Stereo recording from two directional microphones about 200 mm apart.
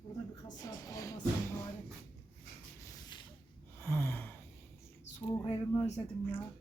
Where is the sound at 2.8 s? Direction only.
20° left (ahead or behind).